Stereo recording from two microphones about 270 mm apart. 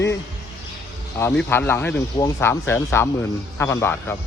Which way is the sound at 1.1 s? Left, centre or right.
Centre.